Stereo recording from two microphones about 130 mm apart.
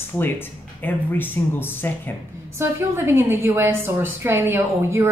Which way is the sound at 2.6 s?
20° right (ahead or behind).